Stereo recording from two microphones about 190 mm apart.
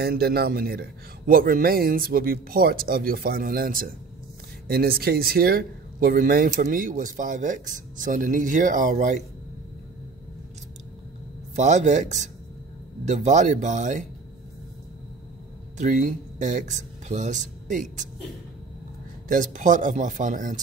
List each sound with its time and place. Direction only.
0.0 s speech: 55° right (ahead or behind)
11.5 s speech: 40° right (ahead or behind)
15.8 s speech: 40° right (ahead or behind)
19.2 s speech: 45° right (ahead or behind)